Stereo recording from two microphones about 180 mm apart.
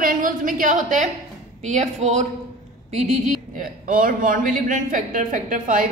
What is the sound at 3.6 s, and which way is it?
Speech, 50° right (ahead or behind).